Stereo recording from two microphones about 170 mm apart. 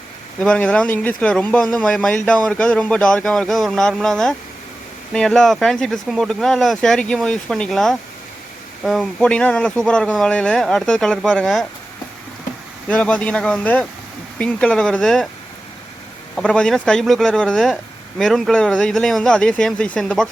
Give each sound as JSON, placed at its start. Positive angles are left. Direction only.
{"t": 0.4, "sound": "speech", "side_deg": 5}
{"t": 12.9, "sound": "speech", "side_deg": 5}
{"t": 16.3, "sound": "speech", "side_deg": 5}